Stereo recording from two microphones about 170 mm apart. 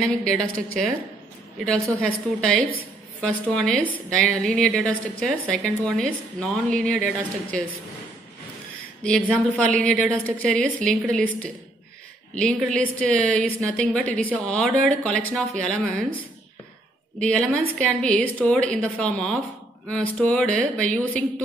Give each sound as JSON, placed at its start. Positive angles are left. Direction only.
{"t": 0.0, "sound": "a woman's voice", "side_deg": 5}
{"t": 1.6, "sound": "a woman's voice", "side_deg": 0}
{"t": 9.3, "sound": "a woman's voice", "side_deg": 5}
{"t": 17.2, "sound": "a woman's voice", "side_deg": 5}